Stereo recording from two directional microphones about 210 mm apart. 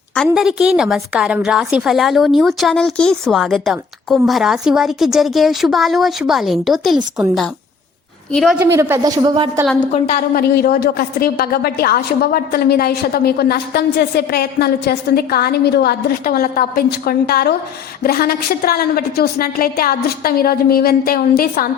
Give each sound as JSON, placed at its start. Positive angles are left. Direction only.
{"t": 0.3, "sound": "a woman's voice", "side_deg": -5}
{"t": 8.3, "sound": "a woman's voice", "side_deg": 0}
{"t": 8.5, "sound": "speech", "side_deg": -10}
{"t": 9.9, "sound": "a woman's voice", "side_deg": 45}